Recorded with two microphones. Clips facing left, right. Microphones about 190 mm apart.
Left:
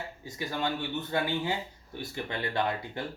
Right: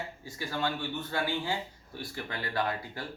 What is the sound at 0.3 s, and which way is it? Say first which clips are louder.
Speech: left 1 dB; 20° left (ahead or behind).